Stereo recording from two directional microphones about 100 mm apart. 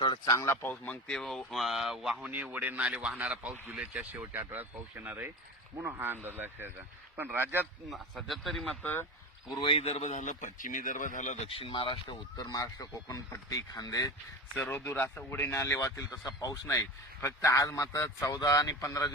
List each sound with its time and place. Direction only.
0.0 s a sound: 50° left (ahead or behind)
0.3 s speech: 25° left (ahead or behind); by 2.3 s 5° right (ahead or behind)
2.3 s a man's voice: 15° right (ahead or behind)
7.9 s speech: centre (ahead or behind)
8.8 s speech: 20° left (ahead or behind)
9.6 s speech: 70° left (ahead or behind); by 10.1 s 90° left
11.4 s speech: 65° left (ahead or behind)
12.4 s speech: 40° left (ahead or behind)
14.5 s speech: 20° left (ahead or behind)